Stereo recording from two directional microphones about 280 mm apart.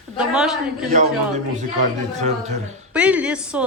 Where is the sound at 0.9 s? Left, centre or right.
Right.